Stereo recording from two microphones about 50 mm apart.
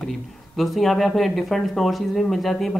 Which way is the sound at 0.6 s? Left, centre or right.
Centre.